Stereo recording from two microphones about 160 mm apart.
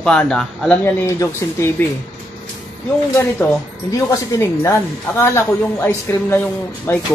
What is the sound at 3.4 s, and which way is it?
Speech, 15° left (ahead or behind).